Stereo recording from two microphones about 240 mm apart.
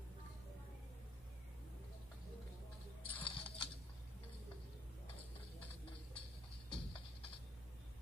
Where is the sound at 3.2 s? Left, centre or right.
Left.